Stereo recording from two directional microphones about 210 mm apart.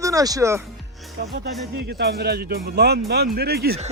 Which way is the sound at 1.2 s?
50° right (ahead or behind).